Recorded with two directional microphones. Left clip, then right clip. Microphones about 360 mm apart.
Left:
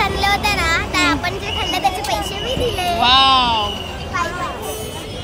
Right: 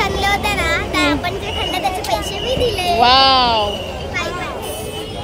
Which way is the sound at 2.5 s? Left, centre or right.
Centre.